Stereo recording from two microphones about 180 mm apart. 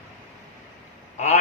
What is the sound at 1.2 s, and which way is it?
Speech, 40° left (ahead or behind).